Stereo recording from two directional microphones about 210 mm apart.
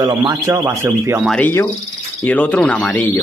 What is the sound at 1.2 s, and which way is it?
Speech, 5° left (ahead or behind).